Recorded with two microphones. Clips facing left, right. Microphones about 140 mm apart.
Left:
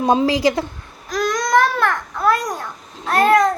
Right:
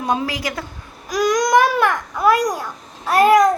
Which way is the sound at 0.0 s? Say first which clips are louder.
Left 6 dB; 25° left (ahead or behind).